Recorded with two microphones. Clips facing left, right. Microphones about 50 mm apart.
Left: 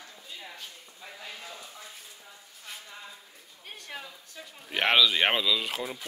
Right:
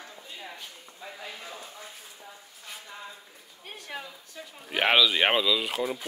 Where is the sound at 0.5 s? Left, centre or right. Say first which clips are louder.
Right 2 dB; centre.